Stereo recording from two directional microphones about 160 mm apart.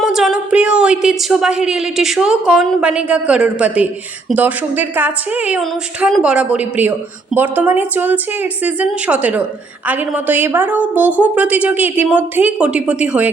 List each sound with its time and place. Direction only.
0.0 s a woman's voice: centre (ahead or behind)